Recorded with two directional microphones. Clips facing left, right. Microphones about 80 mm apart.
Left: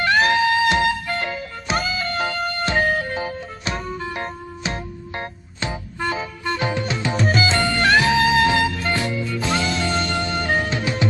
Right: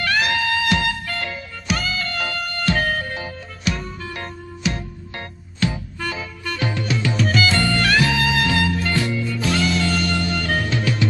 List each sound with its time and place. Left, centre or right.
0.0 s music: left